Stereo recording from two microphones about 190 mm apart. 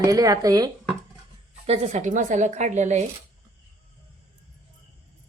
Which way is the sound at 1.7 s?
40° right (ahead or behind).